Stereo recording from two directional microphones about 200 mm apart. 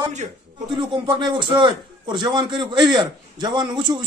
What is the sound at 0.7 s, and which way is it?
A man's voice, 25° right (ahead or behind).